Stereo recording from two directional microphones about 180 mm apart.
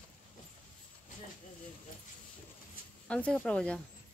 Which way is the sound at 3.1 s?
5° left (ahead or behind).